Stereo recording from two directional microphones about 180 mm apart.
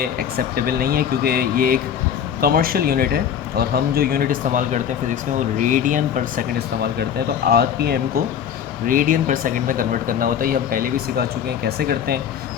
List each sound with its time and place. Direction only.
0.0 s speech: 55° right (ahead or behind)
7.0 s speech: 60° right (ahead or behind)
8.9 s speech: 50° right (ahead or behind)